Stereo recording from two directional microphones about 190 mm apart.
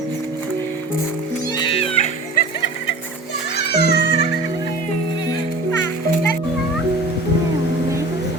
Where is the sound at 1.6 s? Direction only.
30° left (ahead or behind).